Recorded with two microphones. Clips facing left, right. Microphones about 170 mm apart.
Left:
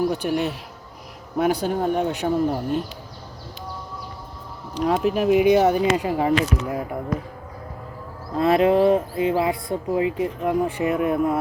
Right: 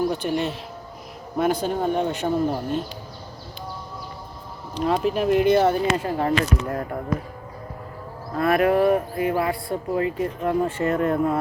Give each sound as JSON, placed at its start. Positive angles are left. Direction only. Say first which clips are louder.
{"t": 0.2, "sound": "speech", "louder": "left 1 dB", "side_deg": 5}
{"t": 4.7, "sound": "speech", "louder": "left 1 dB", "side_deg": 10}
{"t": 8.4, "sound": "speech", "louder": "left 2 dB", "side_deg": 25}